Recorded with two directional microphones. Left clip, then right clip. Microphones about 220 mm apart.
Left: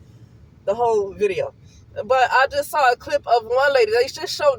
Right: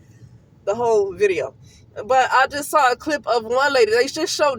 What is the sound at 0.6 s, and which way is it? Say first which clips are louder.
A man's voice: right 1 dB; 35° right (ahead or behind).